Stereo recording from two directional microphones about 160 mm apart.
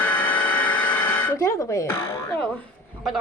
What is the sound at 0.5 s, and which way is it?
Vehicle, 10° left (ahead or behind).